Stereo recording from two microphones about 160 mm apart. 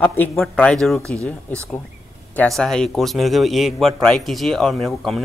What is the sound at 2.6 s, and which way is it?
A man's voice, 5° left (ahead or behind).